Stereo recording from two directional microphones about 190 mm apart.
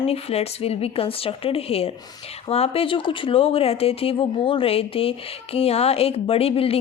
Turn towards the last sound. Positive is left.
turn(degrees=30)  # may be behind; listen again after turning